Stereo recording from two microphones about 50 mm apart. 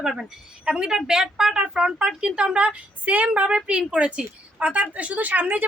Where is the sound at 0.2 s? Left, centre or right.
Centre.